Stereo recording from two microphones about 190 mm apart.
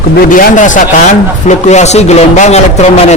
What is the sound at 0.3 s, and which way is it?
A man's voice, 45° left (ahead or behind).